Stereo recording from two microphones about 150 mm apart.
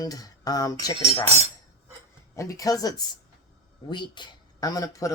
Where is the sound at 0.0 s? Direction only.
25° left (ahead or behind).